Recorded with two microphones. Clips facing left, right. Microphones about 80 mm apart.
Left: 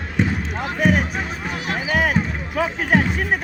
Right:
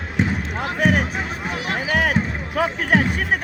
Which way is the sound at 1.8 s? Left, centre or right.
Right.